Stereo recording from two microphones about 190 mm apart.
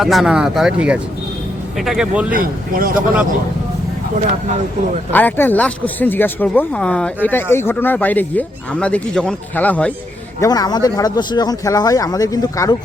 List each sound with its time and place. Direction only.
0.0 s speech: centre (ahead or behind)
2.3 s speech: 50° right (ahead or behind)
5.1 s speech: 10° left (ahead or behind)
10.4 s speech: 20° left (ahead or behind)